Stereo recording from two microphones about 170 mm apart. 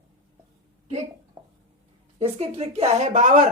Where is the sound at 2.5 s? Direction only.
35° right (ahead or behind).